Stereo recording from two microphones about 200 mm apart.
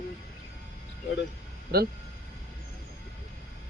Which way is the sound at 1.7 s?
50° right (ahead or behind).